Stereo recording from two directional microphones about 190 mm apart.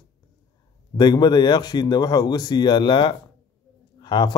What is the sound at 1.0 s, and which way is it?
Speech, 20° left (ahead or behind).